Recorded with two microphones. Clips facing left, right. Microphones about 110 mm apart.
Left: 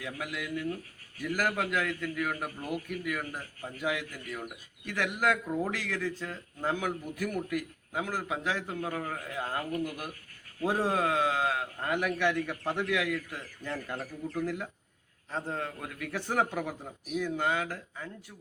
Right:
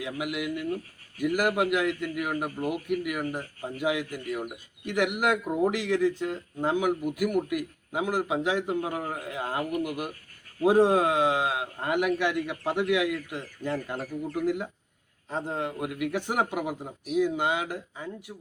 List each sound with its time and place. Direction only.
0.0 s a man's voice: 15° right (ahead or behind)